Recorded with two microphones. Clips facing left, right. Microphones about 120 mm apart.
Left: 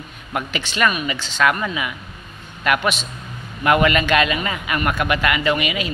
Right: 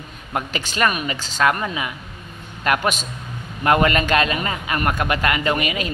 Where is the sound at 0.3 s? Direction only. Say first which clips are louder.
Even; 35° right (ahead or behind).